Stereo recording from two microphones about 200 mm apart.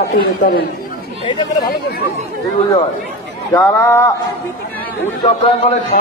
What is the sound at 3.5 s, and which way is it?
Speech, 15° left (ahead or behind).